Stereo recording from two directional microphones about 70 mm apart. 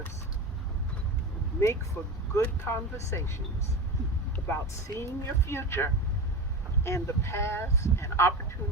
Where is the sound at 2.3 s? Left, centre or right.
Left.